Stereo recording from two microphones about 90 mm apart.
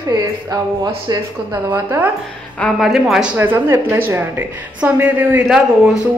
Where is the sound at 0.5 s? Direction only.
50° right (ahead or behind).